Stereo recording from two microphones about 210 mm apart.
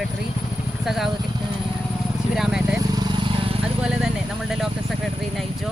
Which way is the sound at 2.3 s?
5° right (ahead or behind).